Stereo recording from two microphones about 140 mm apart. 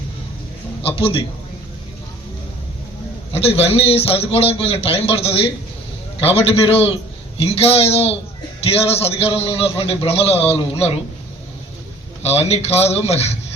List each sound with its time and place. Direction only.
0.8 s a man's voice: 40° left (ahead or behind)
3.3 s a man's voice: 45° left (ahead or behind)
12.2 s a man's voice: 50° left (ahead or behind)